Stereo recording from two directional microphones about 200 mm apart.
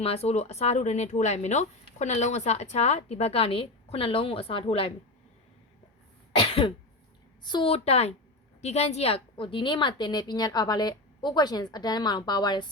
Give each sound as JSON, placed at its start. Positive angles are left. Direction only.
{"t": 0.0, "sound": "speech", "side_deg": 30}
{"t": 6.3, "sound": "cough", "side_deg": 25}
{"t": 7.4, "sound": "a woman's voice", "side_deg": 25}